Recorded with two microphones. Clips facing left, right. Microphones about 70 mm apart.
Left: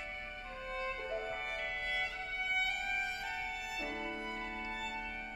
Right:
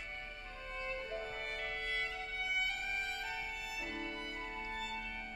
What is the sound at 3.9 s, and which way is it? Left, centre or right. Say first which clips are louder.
Music: left 2 dB; centre.